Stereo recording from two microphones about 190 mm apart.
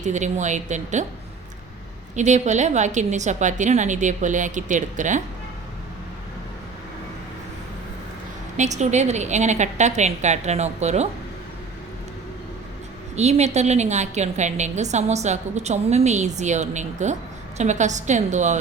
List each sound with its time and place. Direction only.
0.0 s a woman's voice: 40° right (ahead or behind)
2.1 s a woman's voice: 40° right (ahead or behind)
8.5 s a woman's voice: 40° right (ahead or behind)
13.1 s a woman's voice: 35° right (ahead or behind)